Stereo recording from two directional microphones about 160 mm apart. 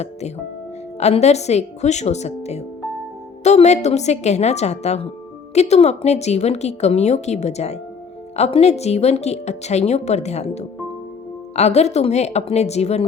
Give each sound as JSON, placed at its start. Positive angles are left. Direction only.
{"t": 0.0, "sound": "a woman's voice", "side_deg": 45}